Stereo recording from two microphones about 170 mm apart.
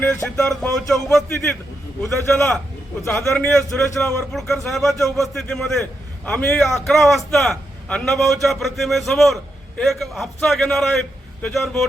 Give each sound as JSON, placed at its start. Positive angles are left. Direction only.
{"t": 0.3, "sound": "a man's voice", "side_deg": 5}